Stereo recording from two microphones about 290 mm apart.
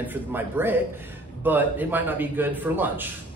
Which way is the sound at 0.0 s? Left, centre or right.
Centre.